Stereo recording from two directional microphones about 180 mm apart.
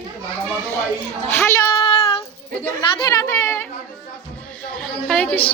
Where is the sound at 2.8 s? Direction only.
20° left (ahead or behind).